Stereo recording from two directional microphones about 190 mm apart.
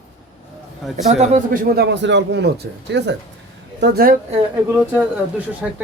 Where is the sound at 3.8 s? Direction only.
55° right (ahead or behind).